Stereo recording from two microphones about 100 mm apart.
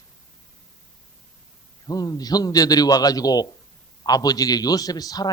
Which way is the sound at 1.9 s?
40° left (ahead or behind).